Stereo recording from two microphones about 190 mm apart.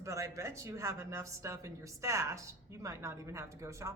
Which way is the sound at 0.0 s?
15° right (ahead or behind).